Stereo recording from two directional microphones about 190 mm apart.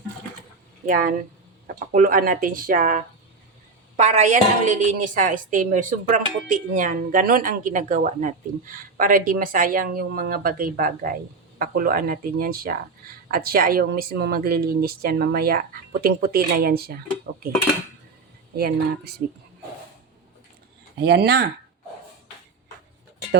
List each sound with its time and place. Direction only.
0.9 s a woman's voice: 45° right (ahead or behind)
18.5 s a woman's voice: 55° right (ahead or behind)
21.0 s speech: 60° right (ahead or behind)